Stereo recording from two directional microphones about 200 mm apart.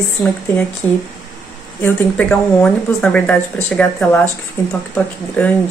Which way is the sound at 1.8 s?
10° left (ahead or behind).